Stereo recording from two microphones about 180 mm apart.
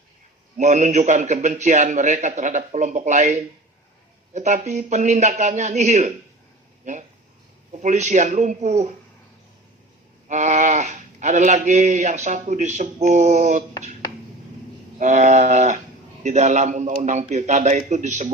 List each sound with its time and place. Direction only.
0.5 s speech: 40° right (ahead or behind)
10.2 s speech: 40° right (ahead or behind)
14.9 s speech: 40° right (ahead or behind)